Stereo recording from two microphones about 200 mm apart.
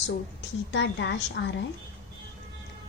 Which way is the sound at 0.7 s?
60° left (ahead or behind).